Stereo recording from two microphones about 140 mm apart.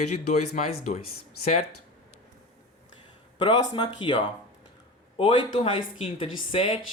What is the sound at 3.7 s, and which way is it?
A man's voice, 35° left (ahead or behind).